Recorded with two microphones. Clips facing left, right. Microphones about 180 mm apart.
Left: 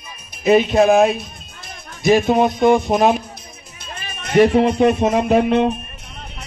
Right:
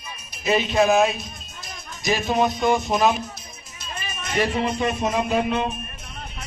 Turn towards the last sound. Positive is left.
turn(degrees=65)  # may be behind; listen again after turning